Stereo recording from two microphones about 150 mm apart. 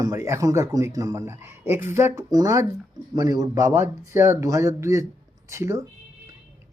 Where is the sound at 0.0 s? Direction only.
20° right (ahead or behind).